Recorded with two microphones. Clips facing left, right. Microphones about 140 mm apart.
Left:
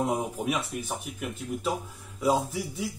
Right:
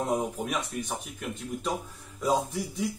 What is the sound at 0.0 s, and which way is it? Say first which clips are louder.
Speech: left 1 dB; 5° left (ahead or behind).